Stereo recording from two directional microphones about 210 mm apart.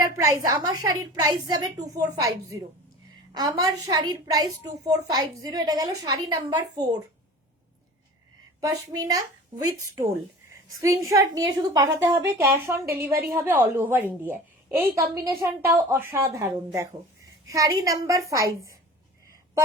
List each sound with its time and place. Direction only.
0.0 s a woman's voice: 15° right (ahead or behind)
8.6 s a woman's voice: 15° right (ahead or behind)
10.8 s a woman's voice: 15° right (ahead or behind)